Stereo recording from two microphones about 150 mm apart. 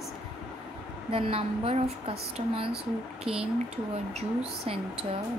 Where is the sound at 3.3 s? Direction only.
5° right (ahead or behind).